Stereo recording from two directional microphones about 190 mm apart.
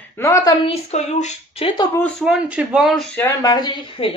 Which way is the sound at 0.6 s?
35° left (ahead or behind).